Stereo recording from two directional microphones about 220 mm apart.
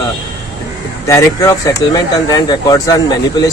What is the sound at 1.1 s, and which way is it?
Speech, 15° left (ahead or behind).